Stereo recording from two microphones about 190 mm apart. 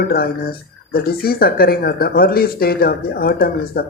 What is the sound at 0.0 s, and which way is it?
Speech, 50° left (ahead or behind).